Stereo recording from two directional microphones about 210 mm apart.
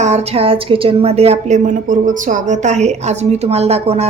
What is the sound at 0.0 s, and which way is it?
A woman's voice, 30° right (ahead or behind).